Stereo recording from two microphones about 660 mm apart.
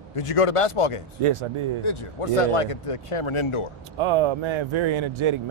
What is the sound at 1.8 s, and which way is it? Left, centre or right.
Speech, left.